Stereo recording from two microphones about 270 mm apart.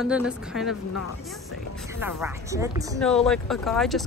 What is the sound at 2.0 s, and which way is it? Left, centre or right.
Speech, centre.